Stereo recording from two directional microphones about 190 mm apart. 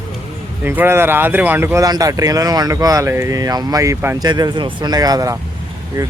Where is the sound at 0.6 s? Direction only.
10° right (ahead or behind).